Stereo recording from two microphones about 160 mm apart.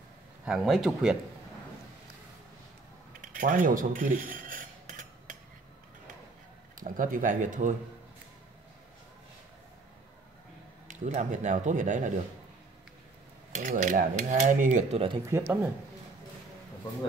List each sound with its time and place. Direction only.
0.5 s speech: centre (ahead or behind)
3.2 s cutlery: 55° right (ahead or behind)
6.8 s speech: 55° right (ahead or behind)
10.9 s a sound: 50° right (ahead or behind)
13.5 s a sound: 50° right (ahead or behind)
15.2 s speech: 15° right (ahead or behind)